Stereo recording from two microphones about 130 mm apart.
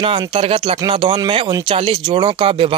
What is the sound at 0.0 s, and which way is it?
Speech, 45° right (ahead or behind).